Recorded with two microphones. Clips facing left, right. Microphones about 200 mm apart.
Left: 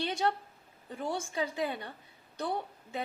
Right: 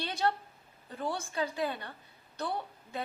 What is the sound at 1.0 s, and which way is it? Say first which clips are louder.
Speech: even; 20° left (ahead or behind).